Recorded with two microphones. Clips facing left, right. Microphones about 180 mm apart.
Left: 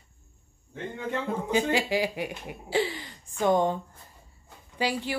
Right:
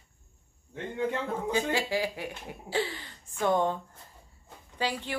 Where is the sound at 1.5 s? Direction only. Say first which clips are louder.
Left 4 dB; 15° left (ahead or behind).